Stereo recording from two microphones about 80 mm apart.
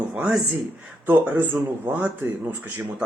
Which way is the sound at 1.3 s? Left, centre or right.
Right.